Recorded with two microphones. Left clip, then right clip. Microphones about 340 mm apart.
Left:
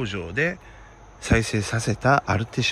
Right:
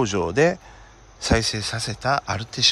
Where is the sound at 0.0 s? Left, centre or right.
Centre.